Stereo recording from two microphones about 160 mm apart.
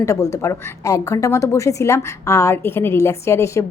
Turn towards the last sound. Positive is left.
turn(degrees=20)  # may be behind; listen again after turning